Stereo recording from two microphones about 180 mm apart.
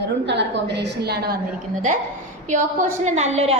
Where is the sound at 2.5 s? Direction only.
45° right (ahead or behind).